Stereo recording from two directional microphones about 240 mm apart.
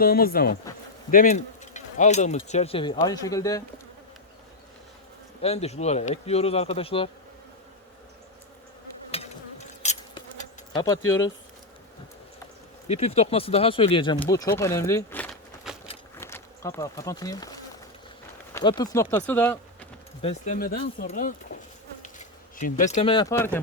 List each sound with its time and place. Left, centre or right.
0.0 s speech: left; by 3.6 s centre
5.4 s speech: left
9.8 s insect: left
10.8 s speech: centre
12.9 s speech: left; by 19.9 s centre
20.2 s speech: left; by 23.6 s centre